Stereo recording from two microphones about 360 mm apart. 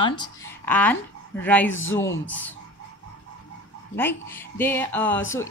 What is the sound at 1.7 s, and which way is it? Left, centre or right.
Speech, left.